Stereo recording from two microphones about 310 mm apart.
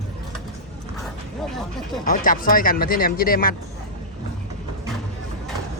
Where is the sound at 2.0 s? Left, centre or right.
Left.